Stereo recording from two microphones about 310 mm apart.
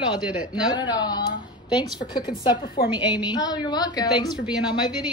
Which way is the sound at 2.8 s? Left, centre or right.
Left.